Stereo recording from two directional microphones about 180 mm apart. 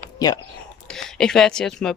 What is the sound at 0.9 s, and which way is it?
Speech, 5° left (ahead or behind).